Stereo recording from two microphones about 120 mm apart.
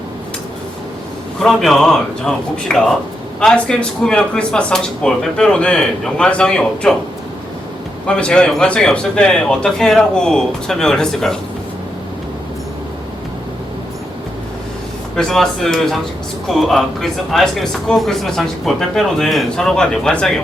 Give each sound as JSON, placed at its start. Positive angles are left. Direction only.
{"t": 1.4, "sound": "speech", "side_deg": 0}
{"t": 8.0, "sound": "speech", "side_deg": 10}
{"t": 15.1, "sound": "speech", "side_deg": 5}